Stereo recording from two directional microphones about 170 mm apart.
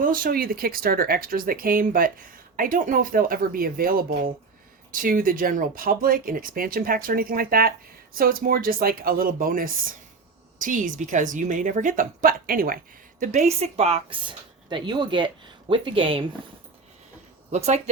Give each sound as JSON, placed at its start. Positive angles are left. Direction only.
{"t": 0.0, "sound": "a woman's voice", "side_deg": -55}
{"t": 17.5, "sound": "a woman's voice", "side_deg": -45}